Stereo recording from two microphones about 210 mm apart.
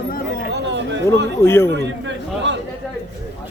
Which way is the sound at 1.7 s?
60° right (ahead or behind).